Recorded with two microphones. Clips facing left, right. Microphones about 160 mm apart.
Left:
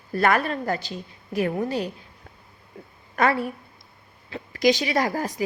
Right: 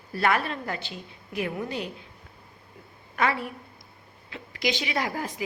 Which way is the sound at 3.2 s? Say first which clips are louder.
Left 4 dB; 45° left (ahead or behind).